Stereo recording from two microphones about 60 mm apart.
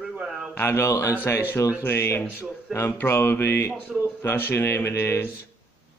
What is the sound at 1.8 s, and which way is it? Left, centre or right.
Speech, left.